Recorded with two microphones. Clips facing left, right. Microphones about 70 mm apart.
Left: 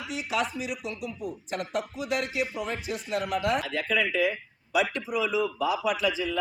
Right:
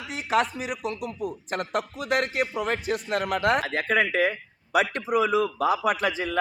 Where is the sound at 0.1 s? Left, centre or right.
Right.